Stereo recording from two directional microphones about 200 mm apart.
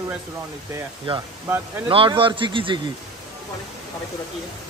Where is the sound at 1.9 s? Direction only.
25° right (ahead or behind).